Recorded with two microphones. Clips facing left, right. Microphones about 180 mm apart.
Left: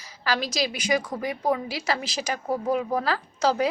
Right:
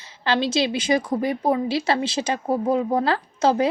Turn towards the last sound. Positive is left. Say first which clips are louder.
# right 4 dB
turn(degrees=-25)  # may be behind; listen again after turning